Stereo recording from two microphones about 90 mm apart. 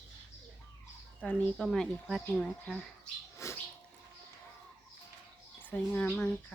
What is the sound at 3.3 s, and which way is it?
Bird, 30° left (ahead or behind).